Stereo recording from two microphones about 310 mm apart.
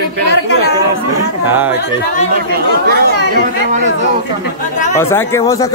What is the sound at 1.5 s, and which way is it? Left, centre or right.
Speech, centre.